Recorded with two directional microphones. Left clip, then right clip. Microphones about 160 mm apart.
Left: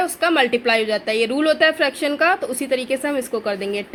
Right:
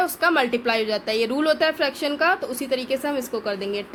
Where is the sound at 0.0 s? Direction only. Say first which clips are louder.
Left 2 dB; 25° left (ahead or behind).